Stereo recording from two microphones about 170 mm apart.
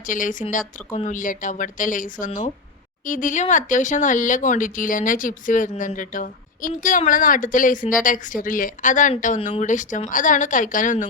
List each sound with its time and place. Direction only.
0.1 s speech: 50° left (ahead or behind)